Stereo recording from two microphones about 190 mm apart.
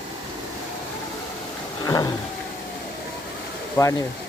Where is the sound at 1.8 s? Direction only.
20° left (ahead or behind).